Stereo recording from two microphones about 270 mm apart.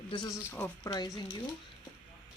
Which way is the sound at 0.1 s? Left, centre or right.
Centre.